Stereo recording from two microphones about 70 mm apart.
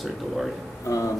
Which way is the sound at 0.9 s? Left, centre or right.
Left.